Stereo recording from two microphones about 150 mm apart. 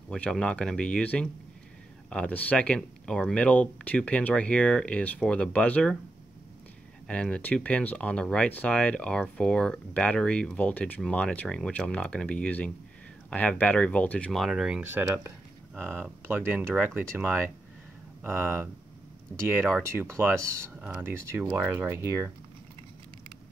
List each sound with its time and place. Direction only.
0.1 s speech: 5° left (ahead or behind)
7.1 s speech: 5° left (ahead or behind); by 17.0 s 10° right (ahead or behind)
18.2 s speech: 15° right (ahead or behind)
19.9 s speech: 15° right (ahead or behind)